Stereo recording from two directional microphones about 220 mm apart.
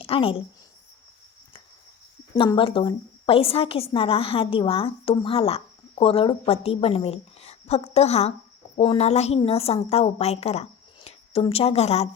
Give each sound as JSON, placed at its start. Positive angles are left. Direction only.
{"t": 0.0, "sound": "a woman's voice", "side_deg": 25}
{"t": 2.3, "sound": "a woman's voice", "side_deg": 25}